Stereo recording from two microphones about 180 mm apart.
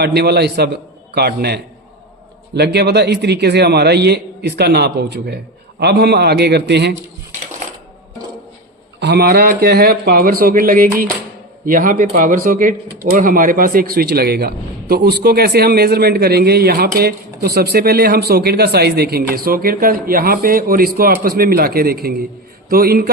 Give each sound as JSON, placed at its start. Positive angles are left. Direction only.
{"t": 0.0, "sound": "a man's voice", "side_deg": -65}
{"t": 9.0, "sound": "a man's voice", "side_deg": -65}